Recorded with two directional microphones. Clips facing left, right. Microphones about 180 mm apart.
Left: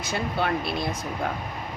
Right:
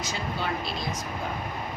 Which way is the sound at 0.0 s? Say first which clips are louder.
Left 4 dB; 60° left (ahead or behind).